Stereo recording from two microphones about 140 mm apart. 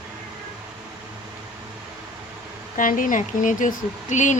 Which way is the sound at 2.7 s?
70° left (ahead or behind).